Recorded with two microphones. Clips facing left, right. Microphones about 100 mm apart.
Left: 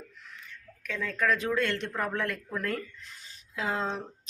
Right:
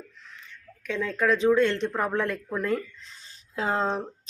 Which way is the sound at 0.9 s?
25° right (ahead or behind).